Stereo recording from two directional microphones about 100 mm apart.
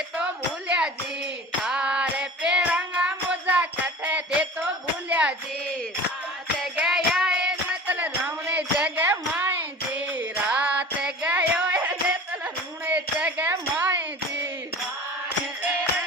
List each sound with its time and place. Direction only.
1.6 s music: 10° right (ahead or behind)
6.8 s music: 5° right (ahead or behind)